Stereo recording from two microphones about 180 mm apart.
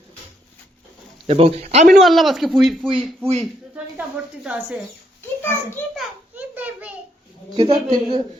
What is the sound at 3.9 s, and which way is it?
Speech, 5° right (ahead or behind).